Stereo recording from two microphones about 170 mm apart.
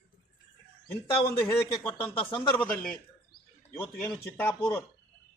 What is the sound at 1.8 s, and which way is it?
Speech, 10° left (ahead or behind).